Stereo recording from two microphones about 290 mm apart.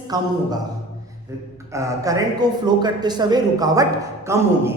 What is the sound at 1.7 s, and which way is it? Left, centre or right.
A man's voice, centre.